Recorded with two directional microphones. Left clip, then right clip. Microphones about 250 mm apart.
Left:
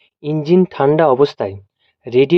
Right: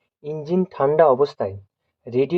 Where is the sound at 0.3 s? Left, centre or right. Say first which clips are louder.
Left 9 dB; left.